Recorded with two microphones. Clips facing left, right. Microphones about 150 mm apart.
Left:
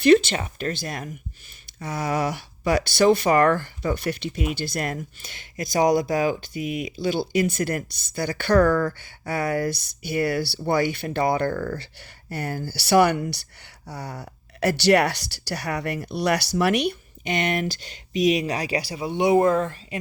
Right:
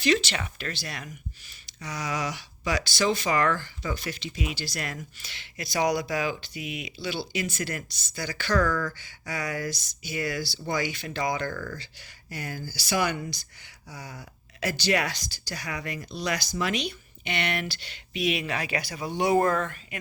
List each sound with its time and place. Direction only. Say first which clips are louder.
0.0 s speech: left 9 dB; 55° left (ahead or behind)
11.8 s speech: left 4 dB; 60° left (ahead or behind)
17.2 s speech: left 6 dB; 45° left (ahead or behind)